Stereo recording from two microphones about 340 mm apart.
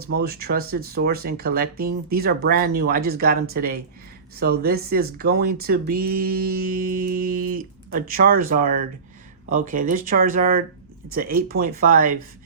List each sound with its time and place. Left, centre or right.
0.0 s speech: right